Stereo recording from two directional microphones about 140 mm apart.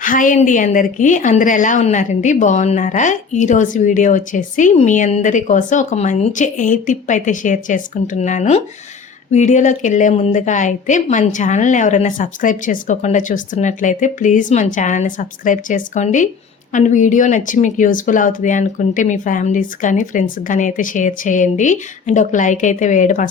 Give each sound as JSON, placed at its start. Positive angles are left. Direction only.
{"t": 0.0, "sound": "a woman's voice", "side_deg": 75}